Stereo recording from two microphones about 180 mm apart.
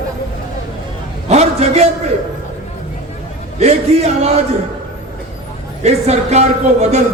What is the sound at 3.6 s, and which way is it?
Speech, 35° right (ahead or behind).